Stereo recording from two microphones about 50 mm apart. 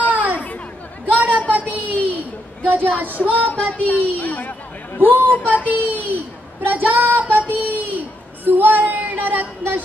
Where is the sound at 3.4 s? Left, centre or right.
Left.